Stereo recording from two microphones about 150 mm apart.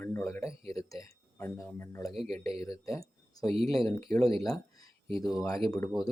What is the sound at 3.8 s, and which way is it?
Speech, 25° left (ahead or behind).